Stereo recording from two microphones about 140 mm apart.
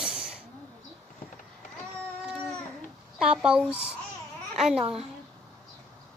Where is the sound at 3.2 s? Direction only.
5° right (ahead or behind).